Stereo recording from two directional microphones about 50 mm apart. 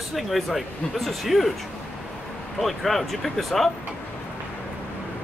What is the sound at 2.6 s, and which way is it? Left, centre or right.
Speech, centre.